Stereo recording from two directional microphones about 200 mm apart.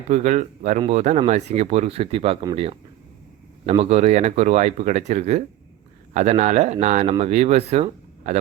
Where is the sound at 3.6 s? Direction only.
30° right (ahead or behind).